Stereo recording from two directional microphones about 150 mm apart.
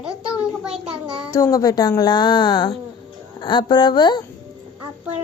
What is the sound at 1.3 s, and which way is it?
Speech, 20° left (ahead or behind).